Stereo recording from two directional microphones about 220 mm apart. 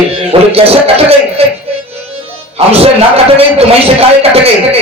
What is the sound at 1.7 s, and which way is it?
Music, 25° right (ahead or behind).